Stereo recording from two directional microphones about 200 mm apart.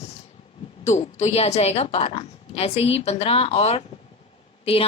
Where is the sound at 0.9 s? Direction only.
35° left (ahead or behind).